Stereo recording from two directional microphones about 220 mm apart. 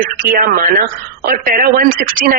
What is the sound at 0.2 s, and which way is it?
Speech, 40° right (ahead or behind).